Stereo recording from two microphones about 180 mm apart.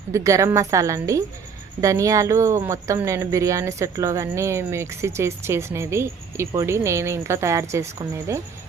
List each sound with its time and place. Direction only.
0.1 s speech: 15° right (ahead or behind)